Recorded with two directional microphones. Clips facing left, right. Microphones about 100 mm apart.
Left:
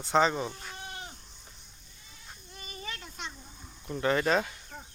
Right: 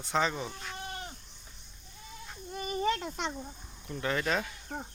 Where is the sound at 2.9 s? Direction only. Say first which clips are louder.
Right 7 dB; 65° right (ahead or behind).